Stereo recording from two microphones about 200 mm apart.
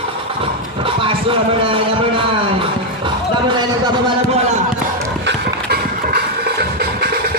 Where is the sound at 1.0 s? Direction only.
25° right (ahead or behind).